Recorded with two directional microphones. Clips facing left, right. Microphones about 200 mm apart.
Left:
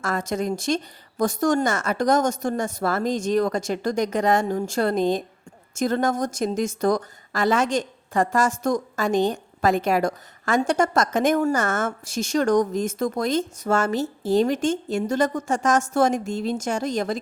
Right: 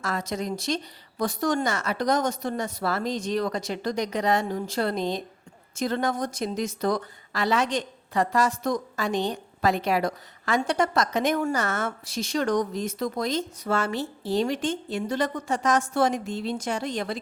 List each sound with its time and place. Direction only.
0.0 s a woman's voice: 50° left (ahead or behind)